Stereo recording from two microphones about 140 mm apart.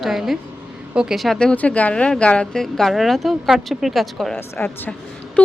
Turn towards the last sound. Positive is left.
turn(degrees=15)  # may be behind; listen again after turning